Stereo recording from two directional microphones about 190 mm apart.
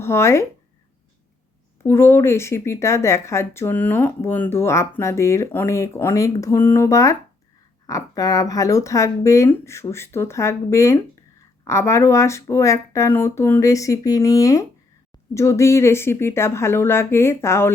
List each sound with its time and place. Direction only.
0.0 s speech: 15° left (ahead or behind)
1.8 s speech: 15° left (ahead or behind)